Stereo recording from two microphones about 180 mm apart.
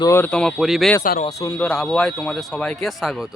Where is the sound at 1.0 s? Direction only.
55° left (ahead or behind).